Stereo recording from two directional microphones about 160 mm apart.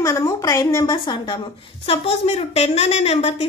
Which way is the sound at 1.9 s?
40° left (ahead or behind).